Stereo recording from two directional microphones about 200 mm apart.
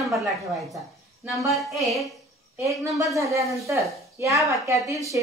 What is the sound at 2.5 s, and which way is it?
A woman's voice, 15° right (ahead or behind).